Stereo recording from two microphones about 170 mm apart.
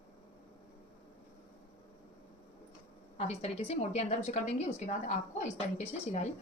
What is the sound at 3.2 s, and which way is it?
A woman's voice, 35° left (ahead or behind).